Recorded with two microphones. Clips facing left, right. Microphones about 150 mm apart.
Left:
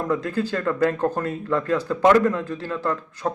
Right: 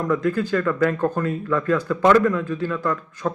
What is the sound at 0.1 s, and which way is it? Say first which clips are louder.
Speech: right 5 dB; 30° left (ahead or behind).